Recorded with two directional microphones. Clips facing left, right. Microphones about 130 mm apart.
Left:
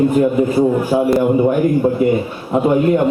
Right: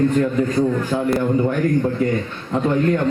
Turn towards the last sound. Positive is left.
turn(degrees=15)  # may be behind; listen again after turning